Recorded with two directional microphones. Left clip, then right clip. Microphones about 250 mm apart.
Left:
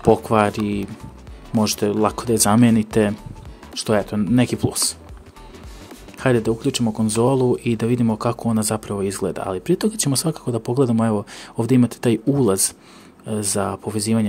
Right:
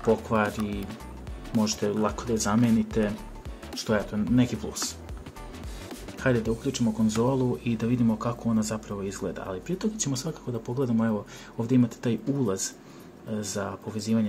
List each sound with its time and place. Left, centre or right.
0.1 s speech: left
6.1 s speech: left